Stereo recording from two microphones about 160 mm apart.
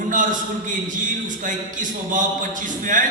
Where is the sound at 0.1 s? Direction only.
55° right (ahead or behind).